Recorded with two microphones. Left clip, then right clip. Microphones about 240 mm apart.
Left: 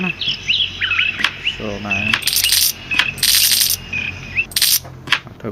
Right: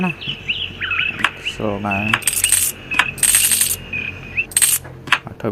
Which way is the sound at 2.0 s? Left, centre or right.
Centre.